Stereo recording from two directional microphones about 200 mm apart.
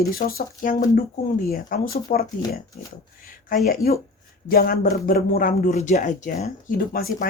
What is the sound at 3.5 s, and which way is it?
Speech, 45° left (ahead or behind).